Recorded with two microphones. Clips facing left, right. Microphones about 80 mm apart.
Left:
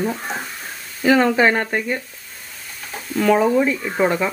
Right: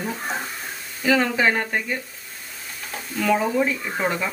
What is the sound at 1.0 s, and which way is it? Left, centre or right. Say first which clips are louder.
Speech: left 5 dB; left.